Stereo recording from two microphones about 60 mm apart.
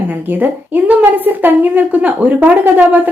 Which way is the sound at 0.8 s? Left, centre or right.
Right.